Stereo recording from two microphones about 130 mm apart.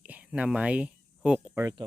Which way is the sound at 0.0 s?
10° right (ahead or behind).